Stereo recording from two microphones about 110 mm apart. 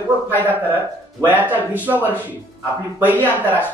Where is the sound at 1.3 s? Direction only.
15° right (ahead or behind).